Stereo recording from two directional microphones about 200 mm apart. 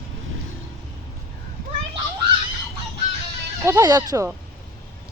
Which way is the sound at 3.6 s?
15° right (ahead or behind).